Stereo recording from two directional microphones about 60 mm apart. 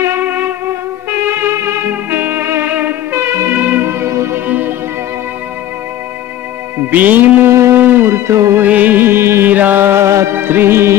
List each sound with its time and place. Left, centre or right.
0.2 s music: right
1.3 s music: right
2.1 s music: right
4.0 s music: right
4.5 s music: right
6.8 s music: right
7.5 s music: right
7.8 s music: right
8.3 s music: right
8.6 s music: right
9.5 s music: right
10.3 s music: right